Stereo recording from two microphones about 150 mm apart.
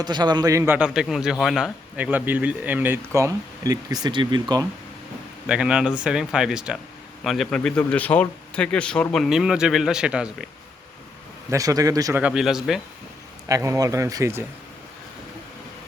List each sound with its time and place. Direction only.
0.0 s speech: 30° right (ahead or behind)
5.5 s speech: 5° right (ahead or behind)
11.5 s speech: 25° right (ahead or behind)
12.2 s speech: 5° right (ahead or behind)
13.5 s speech: 20° right (ahead or behind)